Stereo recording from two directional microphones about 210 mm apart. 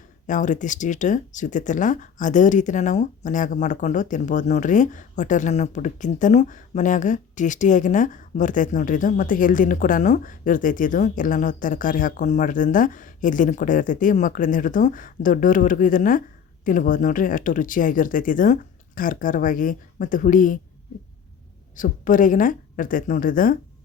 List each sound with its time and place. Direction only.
0.3 s speech: 35° left (ahead or behind)
21.8 s speech: 40° left (ahead or behind)